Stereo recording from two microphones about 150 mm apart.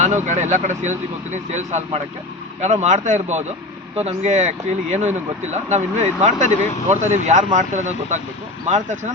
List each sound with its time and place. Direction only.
0.3 s speech: 50° right (ahead or behind)